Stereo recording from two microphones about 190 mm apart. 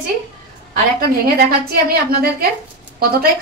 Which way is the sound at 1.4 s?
55° right (ahead or behind).